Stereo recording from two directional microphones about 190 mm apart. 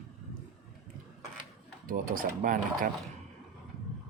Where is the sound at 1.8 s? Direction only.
45° right (ahead or behind).